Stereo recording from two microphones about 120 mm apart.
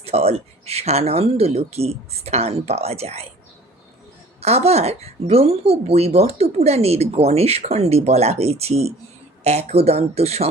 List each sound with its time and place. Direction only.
0.0 s speech: 55° right (ahead or behind)
4.4 s speech: 60° right (ahead or behind)